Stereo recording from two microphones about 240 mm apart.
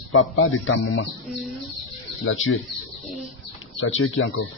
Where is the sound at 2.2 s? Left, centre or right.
Left.